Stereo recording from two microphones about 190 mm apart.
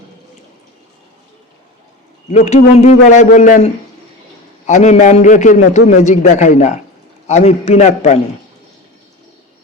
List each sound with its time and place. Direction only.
2.3 s a man's voice: 35° left (ahead or behind)